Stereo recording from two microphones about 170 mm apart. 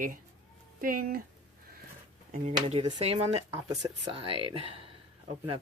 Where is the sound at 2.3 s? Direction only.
40° right (ahead or behind).